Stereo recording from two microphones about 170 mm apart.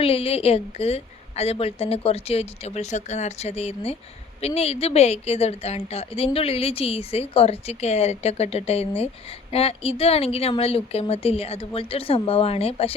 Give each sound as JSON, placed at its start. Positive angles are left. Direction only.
{"t": 0.0, "sound": "a woman's voice", "side_deg": 35}